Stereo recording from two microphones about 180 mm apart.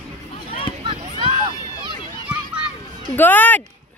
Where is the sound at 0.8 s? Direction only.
30° right (ahead or behind).